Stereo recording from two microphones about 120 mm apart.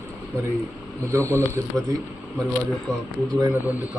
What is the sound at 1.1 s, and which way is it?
Speech, 25° right (ahead or behind).